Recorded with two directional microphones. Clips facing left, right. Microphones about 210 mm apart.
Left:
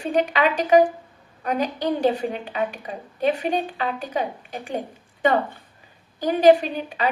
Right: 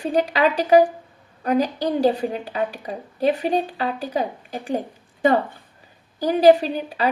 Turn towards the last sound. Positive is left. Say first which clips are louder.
# right 2 dB
turn(degrees=-35)  # may be behind; listen again after turning